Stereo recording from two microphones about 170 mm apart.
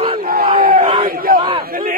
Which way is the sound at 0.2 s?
60° right (ahead or behind).